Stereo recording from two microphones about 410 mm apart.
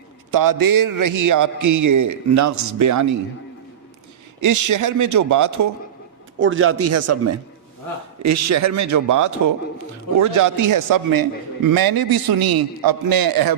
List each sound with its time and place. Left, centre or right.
0.3 s a man's voice: right
4.4 s a man's voice: right
6.4 s a man's voice: right